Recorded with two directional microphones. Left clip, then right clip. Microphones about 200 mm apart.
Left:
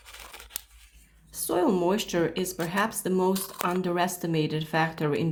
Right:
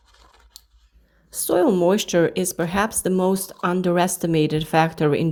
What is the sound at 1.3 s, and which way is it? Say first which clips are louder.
Speech: right 7 dB; 35° right (ahead or behind).